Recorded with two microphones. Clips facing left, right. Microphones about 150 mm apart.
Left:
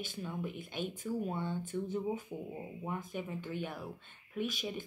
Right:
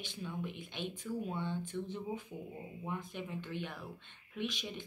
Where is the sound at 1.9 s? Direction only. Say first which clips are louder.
Left 5 dB; 45° left (ahead or behind).